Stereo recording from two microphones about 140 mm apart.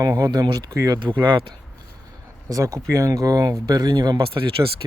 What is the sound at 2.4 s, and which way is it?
Speech, 25° right (ahead or behind).